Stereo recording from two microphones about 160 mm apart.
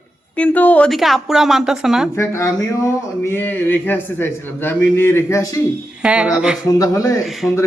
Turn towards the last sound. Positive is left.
turn(degrees=0)  # may be behind; listen again after turning